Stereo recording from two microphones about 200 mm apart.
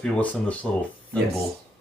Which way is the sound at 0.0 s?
5° left (ahead or behind).